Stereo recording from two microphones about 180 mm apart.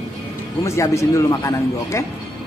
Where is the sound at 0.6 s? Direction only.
15° left (ahead or behind).